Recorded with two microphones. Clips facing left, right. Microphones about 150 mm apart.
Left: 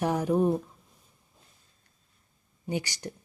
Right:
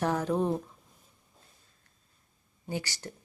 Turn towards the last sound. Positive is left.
turn(degrees=15)  # may be behind; listen again after turning